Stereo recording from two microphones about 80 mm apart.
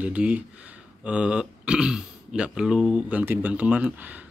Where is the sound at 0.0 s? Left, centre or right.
Centre.